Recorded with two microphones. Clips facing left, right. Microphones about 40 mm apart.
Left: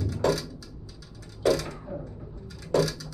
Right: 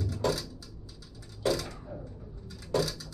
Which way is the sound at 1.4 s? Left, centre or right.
Left.